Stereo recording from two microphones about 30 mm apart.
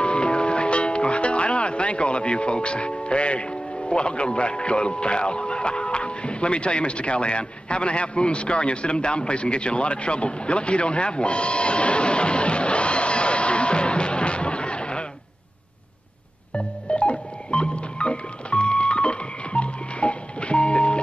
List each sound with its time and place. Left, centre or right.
0.0 s speech: left
16.5 s music: left